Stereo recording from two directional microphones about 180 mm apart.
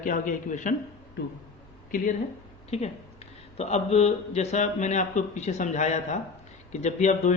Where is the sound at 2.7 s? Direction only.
35° left (ahead or behind).